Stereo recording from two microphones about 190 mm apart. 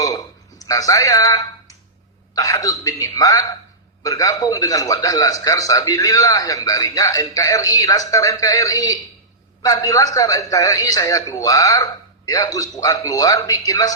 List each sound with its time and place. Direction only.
0.6 s a man's voice: 20° left (ahead or behind)